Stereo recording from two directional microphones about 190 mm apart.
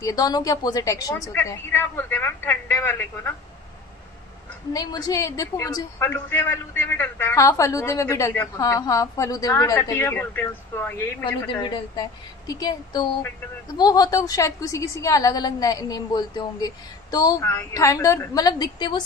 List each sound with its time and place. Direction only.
0.0 s a woman's voice: 20° left (ahead or behind)
4.7 s a woman's voice: 20° left (ahead or behind)
11.4 s a woman's voice: 25° left (ahead or behind)